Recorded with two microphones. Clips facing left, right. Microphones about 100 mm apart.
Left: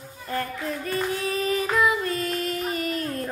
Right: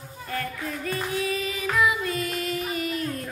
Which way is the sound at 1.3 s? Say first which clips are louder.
Left 3 dB; 40° left (ahead or behind).